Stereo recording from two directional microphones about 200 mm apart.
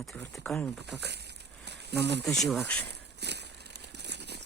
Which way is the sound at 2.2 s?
Centre (ahead or behind).